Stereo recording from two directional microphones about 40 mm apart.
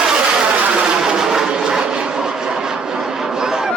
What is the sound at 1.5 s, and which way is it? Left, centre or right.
Vehicle, centre.